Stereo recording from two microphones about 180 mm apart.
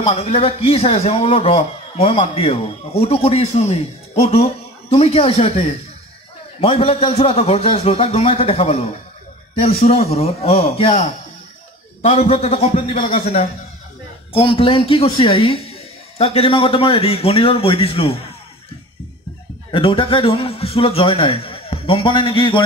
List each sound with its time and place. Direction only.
0.0 s a man's voice: 30° left (ahead or behind)
14.3 s a man's voice: 30° left (ahead or behind)
19.7 s a man's voice: 30° left (ahead or behind)